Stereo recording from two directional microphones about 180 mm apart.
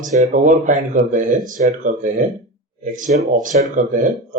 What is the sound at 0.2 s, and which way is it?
Speech, 40° right (ahead or behind).